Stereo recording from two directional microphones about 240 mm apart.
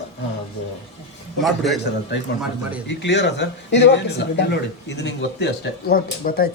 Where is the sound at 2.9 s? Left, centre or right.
Left.